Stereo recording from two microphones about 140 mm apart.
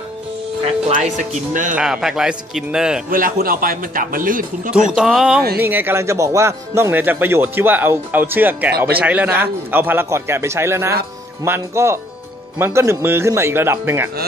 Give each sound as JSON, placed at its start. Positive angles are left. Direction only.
{"t": 0.8, "sound": "speech", "side_deg": -55}
{"t": 1.8, "sound": "speech", "side_deg": -5}
{"t": 3.1, "sound": "speech", "side_deg": -85}
{"t": 4.9, "sound": "speech", "side_deg": -5}
{"t": 5.6, "sound": "speech", "side_deg": -15}